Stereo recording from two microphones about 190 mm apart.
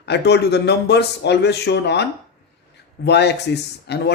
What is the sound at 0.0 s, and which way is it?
A man's voice, 60° left (ahead or behind).